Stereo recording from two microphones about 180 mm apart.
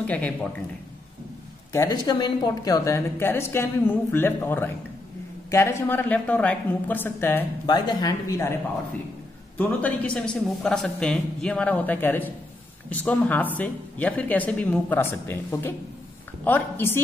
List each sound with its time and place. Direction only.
0.0 s a woman's voice: 5° left (ahead or behind)
1.7 s a woman's voice: 20° left (ahead or behind)
7.6 s speech: 25° left (ahead or behind)
9.6 s a woman's voice: 10° left (ahead or behind)